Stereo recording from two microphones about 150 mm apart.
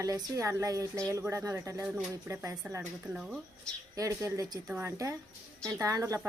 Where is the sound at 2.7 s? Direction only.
10° right (ahead or behind).